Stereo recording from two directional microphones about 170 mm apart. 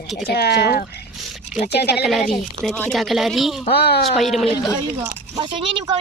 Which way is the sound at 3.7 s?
70° left (ahead or behind).